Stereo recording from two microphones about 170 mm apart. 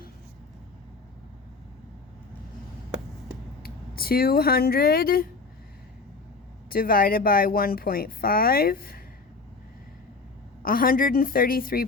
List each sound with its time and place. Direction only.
3.6 s speech: 60° left (ahead or behind)
6.7 s speech: 60° left (ahead or behind)
10.6 s speech: 55° left (ahead or behind)